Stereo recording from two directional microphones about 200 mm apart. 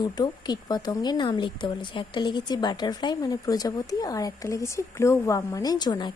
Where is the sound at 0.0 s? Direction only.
20° left (ahead or behind).